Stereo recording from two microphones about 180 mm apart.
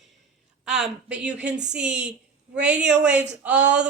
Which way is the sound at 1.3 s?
75° right (ahead or behind).